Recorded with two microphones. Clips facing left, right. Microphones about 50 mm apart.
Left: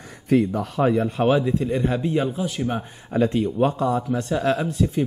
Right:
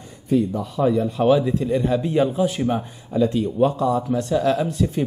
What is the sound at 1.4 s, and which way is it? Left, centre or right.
Speech, centre.